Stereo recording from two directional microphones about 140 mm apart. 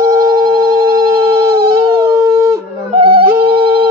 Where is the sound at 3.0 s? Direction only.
40° right (ahead or behind).